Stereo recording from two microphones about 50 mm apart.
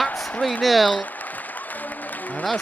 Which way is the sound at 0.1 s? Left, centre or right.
Centre.